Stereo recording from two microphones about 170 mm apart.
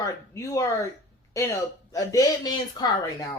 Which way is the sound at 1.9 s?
20° left (ahead or behind).